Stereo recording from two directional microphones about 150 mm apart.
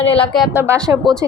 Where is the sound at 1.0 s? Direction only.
Centre (ahead or behind).